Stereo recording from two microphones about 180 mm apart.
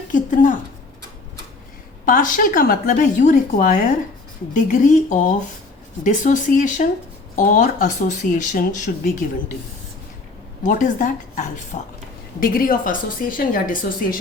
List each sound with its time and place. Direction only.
0.1 s speech: 45° left (ahead or behind)
2.0 s speech: 45° left (ahead or behind)
10.6 s speech: 45° left (ahead or behind)